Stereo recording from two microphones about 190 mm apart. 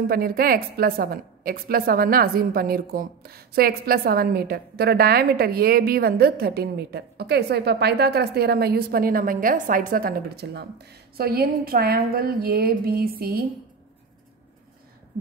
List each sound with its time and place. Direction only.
0.1 s a woman's voice: 50° right (ahead or behind)